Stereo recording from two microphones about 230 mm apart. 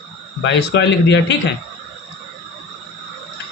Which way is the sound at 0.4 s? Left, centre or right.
Left.